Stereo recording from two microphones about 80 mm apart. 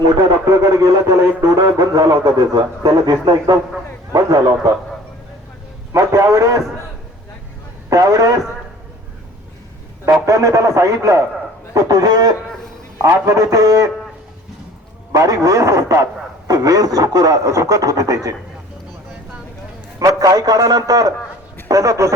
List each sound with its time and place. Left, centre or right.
0.4 s a man's voice: right
5.9 s a man's voice: right
7.9 s a man's voice: right
10.2 s speech: right
15.1 s speech: right
20.0 s speech: right